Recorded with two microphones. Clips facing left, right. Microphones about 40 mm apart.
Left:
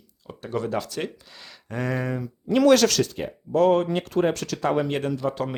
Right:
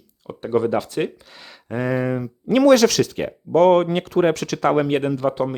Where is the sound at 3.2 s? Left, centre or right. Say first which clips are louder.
Right 7 dB; right.